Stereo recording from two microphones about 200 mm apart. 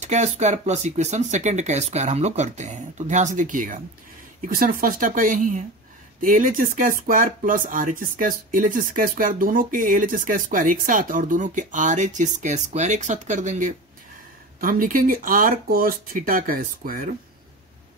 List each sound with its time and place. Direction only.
0.0 s speech: 35° right (ahead or behind)